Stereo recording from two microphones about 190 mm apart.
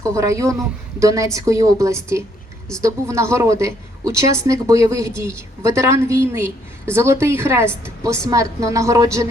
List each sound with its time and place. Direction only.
0.0 s a woman's voice: 15° right (ahead or behind)